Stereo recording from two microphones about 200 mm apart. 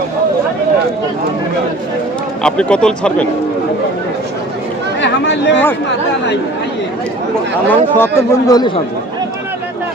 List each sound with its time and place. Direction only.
2.4 s speech: 5° left (ahead or behind)
4.9 s speech: 65° left (ahead or behind)
7.7 s speech: 10° left (ahead or behind)